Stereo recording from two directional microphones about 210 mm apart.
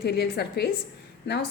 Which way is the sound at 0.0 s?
50° left (ahead or behind).